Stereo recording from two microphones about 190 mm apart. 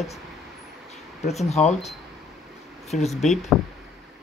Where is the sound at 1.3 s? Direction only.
35° left (ahead or behind).